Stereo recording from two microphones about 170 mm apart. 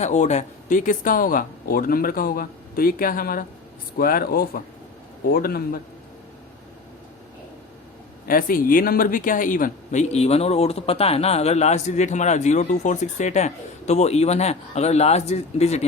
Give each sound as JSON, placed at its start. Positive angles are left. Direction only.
{"t": 0.0, "sound": "speech", "side_deg": 45}
{"t": 8.3, "sound": "speech", "side_deg": 55}